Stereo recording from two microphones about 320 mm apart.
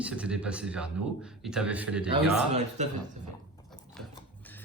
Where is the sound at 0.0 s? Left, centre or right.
Centre.